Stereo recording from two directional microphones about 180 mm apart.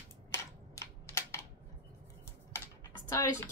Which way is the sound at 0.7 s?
15° left (ahead or behind).